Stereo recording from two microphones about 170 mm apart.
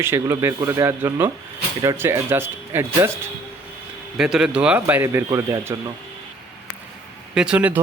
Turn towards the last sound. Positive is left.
turn(degrees=-10)  # may be behind; listen again after turning